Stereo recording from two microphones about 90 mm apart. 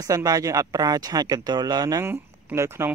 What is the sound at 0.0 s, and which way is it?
Speech, 40° right (ahead or behind).